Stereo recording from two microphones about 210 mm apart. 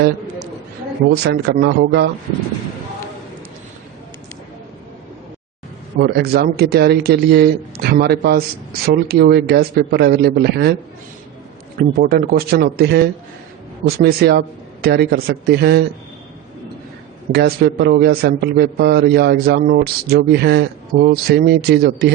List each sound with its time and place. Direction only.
1.1 s a man's voice: 50° right (ahead or behind)
6.0 s a man's voice: 50° right (ahead or behind)
11.8 s a man's voice: 45° right (ahead or behind)
17.3 s a man's voice: 50° right (ahead or behind)